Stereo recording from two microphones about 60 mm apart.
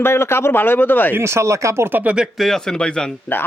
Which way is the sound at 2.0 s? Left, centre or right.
Right.